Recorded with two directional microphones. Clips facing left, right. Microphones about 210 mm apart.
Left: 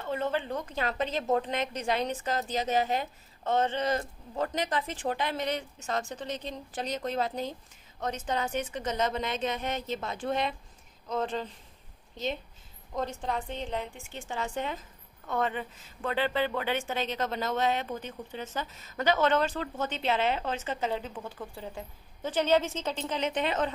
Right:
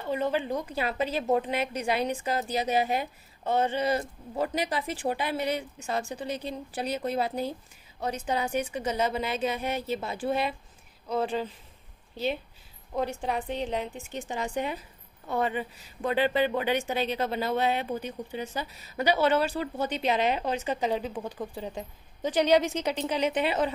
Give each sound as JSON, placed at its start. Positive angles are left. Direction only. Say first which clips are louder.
{"t": 0.0, "sound": "a woman's voice", "louder": "right 3 dB", "side_deg": -15}
{"t": 12.9, "sound": "a woman's voice", "louder": "right 3 dB", "side_deg": -10}